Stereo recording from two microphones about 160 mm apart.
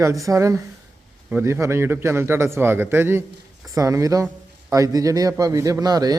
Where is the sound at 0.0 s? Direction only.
20° right (ahead or behind).